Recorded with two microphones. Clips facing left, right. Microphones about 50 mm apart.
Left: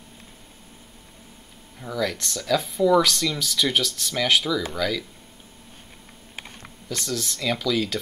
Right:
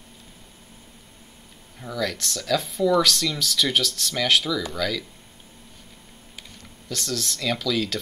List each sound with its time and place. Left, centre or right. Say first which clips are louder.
1.8 s speech: left 1 dB; centre
6.3 s typing: left 5 dB; left
6.9 s speech: even; centre